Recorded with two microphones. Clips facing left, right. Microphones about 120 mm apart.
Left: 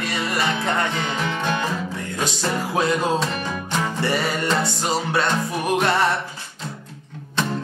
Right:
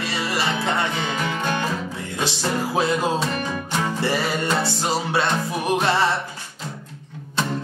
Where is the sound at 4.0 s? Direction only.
25° right (ahead or behind).